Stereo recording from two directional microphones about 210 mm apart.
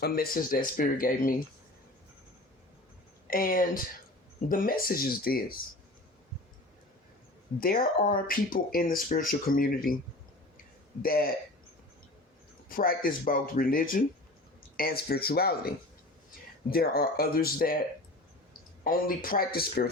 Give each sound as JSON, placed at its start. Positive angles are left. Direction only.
{"t": 0.0, "sound": "speech", "side_deg": 45}
{"t": 3.2, "sound": "speech", "side_deg": 40}
{"t": 8.1, "sound": "speech", "side_deg": 40}
{"t": 11.0, "sound": "speech", "side_deg": 45}
{"t": 12.6, "sound": "speech", "side_deg": 45}
{"t": 18.9, "sound": "speech", "side_deg": 40}